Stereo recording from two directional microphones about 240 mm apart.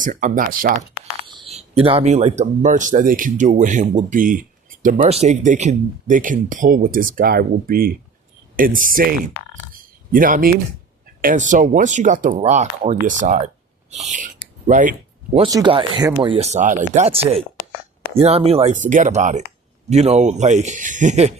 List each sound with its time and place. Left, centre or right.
0.0 s speech: right
1.5 s a man's voice: right
15.4 s a man's voice: centre